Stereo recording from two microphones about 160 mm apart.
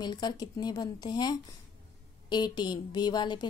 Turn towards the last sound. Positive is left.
turn(degrees=30)  # may be behind; listen again after turning